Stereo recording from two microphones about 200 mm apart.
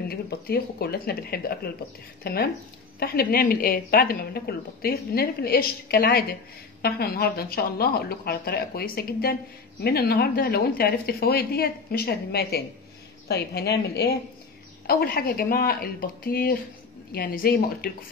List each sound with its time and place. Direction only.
0.1 s a woman's voice: 50° left (ahead or behind)